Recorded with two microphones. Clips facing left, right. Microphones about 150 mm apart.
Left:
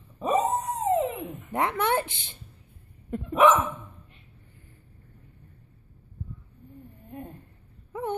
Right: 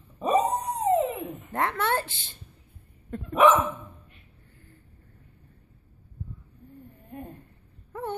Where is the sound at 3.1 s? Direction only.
20° left (ahead or behind).